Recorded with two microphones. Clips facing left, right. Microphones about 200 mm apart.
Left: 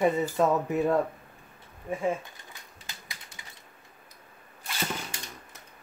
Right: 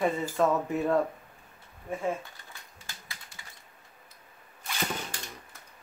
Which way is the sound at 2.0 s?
15° left (ahead or behind).